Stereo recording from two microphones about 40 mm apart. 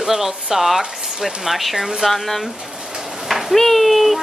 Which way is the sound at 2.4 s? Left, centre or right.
Centre.